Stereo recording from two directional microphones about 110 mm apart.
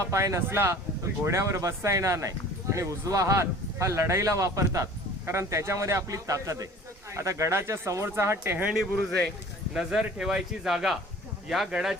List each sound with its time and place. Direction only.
0.1 s speech: 25° right (ahead or behind)
8.5 s speech: 10° right (ahead or behind)